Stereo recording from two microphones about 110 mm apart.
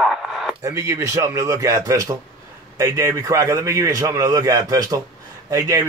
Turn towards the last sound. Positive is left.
turn(degrees=-30)  # may be behind; listen again after turning